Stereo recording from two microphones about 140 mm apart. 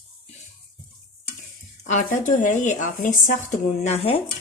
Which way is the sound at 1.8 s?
65° left (ahead or behind).